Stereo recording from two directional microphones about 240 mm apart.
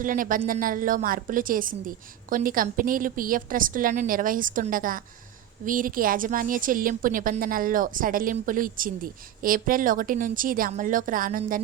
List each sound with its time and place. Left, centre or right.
0.0 s a woman's voice: right